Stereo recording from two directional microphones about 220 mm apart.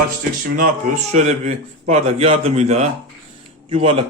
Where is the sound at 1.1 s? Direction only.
30° right (ahead or behind).